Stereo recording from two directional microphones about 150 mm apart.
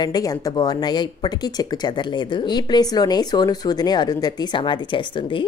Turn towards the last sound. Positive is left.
turn(degrees=35)  # may be behind; listen again after turning